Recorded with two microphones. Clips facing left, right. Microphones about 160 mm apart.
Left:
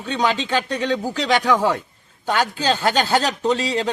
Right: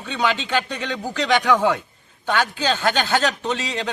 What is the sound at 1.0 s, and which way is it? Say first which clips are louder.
Speech: right 2 dB; 10° left (ahead or behind).